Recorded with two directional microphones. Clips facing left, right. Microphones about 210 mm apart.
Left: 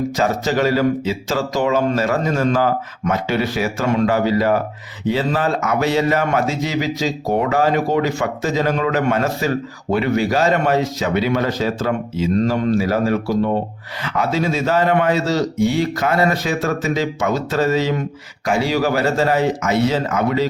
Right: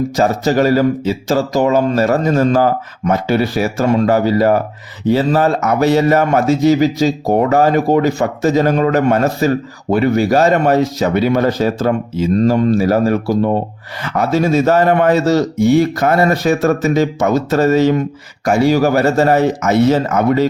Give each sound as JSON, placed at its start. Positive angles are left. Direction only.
{"t": 0.2, "sound": "a man's voice", "side_deg": -40}